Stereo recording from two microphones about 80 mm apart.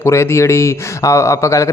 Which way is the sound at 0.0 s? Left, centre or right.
Left.